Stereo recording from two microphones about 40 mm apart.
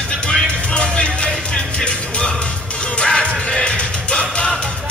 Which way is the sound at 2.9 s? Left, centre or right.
Centre.